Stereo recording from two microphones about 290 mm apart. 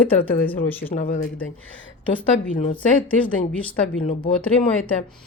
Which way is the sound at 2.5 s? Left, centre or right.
Centre.